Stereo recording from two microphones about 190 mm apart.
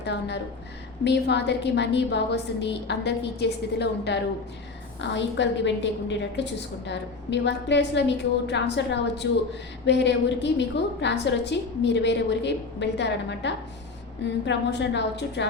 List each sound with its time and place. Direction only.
0.0 s a woman's voice: 65° left (ahead or behind)